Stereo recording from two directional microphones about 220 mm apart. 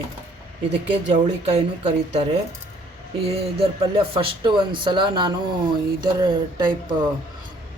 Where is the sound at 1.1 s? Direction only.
20° right (ahead or behind).